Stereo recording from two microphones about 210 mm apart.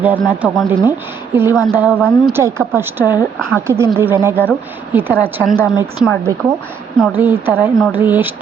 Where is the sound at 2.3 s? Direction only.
10° right (ahead or behind).